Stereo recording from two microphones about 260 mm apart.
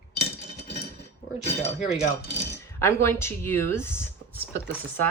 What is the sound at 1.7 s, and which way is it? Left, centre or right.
Cutlery, left.